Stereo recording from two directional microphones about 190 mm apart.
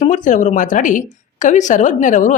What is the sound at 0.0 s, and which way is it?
A woman's voice, 40° left (ahead or behind).